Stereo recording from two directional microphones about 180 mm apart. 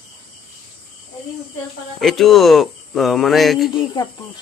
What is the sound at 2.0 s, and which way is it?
Speech, centre (ahead or behind).